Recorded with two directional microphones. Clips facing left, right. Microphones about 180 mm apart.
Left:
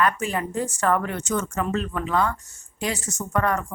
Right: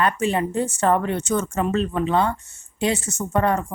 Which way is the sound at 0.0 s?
25° right (ahead or behind).